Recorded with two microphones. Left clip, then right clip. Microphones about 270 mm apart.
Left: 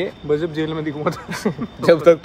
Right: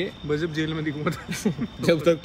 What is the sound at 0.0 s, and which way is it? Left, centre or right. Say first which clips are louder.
Speech: left 6 dB; centre.